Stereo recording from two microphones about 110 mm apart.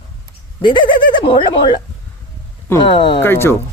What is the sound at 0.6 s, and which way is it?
Speech, 45° left (ahead or behind).